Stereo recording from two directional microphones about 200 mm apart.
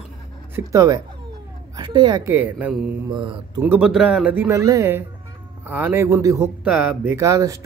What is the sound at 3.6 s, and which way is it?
Speech, 5° right (ahead or behind).